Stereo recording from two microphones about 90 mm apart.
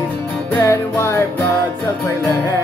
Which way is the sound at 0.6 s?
35° left (ahead or behind).